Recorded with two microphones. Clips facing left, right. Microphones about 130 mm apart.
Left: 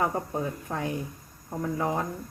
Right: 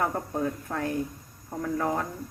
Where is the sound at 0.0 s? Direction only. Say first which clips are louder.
Even; 15° left (ahead or behind).